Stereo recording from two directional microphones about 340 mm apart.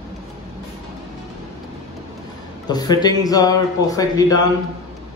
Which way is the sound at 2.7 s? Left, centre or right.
Centre.